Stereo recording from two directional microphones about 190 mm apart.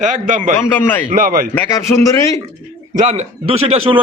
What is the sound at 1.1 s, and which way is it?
Speech, 45° right (ahead or behind).